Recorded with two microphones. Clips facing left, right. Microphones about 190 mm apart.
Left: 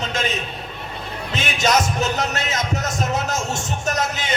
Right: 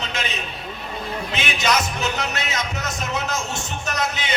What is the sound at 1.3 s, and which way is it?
Music, 45° left (ahead or behind).